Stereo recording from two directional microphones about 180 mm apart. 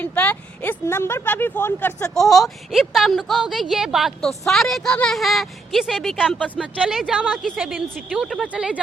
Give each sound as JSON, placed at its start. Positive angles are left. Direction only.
{"t": 0.0, "sound": "speech", "side_deg": 10}
{"t": 2.1, "sound": "a woman's voice", "side_deg": 0}